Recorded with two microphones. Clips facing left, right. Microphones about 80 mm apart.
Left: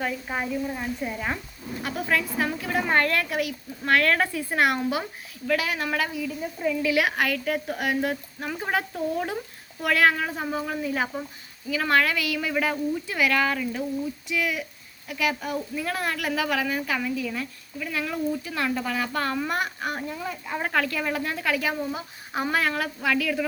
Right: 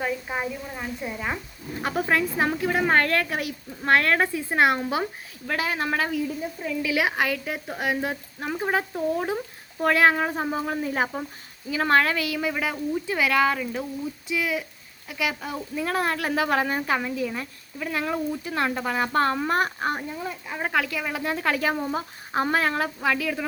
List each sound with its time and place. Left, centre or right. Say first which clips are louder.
0.3 s a woman's voice: left 2 dB; centre
1.8 s a woman's voice: right 3 dB; right
6.8 s a woman's voice: right 1 dB; right
20.5 s speech: even; centre
21.2 s a woman's voice: right 2 dB; right